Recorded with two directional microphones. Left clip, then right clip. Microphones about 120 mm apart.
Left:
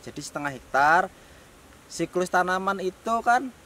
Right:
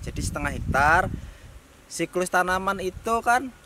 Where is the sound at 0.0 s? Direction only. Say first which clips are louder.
Right 1 dB; 5° right (ahead or behind).